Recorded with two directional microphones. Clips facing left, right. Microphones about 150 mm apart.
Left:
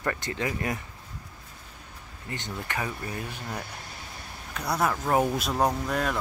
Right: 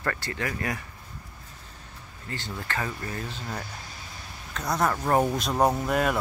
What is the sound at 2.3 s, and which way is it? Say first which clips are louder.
Speech: even; 20° left (ahead or behind).